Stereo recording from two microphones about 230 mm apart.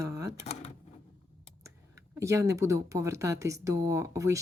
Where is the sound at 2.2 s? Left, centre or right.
Centre.